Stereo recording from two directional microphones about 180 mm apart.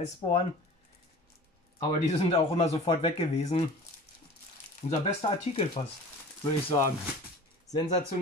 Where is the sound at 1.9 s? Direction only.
35° left (ahead or behind).